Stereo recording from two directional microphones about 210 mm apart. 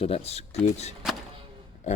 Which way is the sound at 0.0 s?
30° left (ahead or behind).